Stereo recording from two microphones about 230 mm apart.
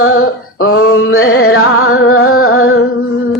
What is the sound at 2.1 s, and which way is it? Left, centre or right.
Music, left.